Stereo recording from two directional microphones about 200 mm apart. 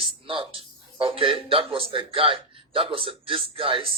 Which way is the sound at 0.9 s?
25° right (ahead or behind).